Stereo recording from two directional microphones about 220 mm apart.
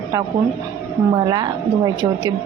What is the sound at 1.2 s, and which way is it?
A woman's voice, 20° right (ahead or behind).